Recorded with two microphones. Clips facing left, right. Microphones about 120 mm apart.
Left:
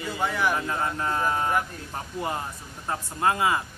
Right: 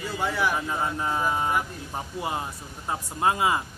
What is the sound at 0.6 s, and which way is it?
Speech, 10° right (ahead or behind).